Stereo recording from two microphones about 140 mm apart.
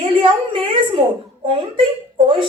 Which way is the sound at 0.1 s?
35° right (ahead or behind).